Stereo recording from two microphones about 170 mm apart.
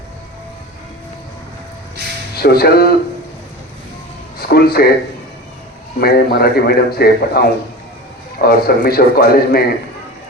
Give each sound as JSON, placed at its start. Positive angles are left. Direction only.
{"t": 2.4, "sound": "a man's voice", "side_deg": 65}
{"t": 4.4, "sound": "speech", "side_deg": 65}
{"t": 6.0, "sound": "a man's voice", "side_deg": 65}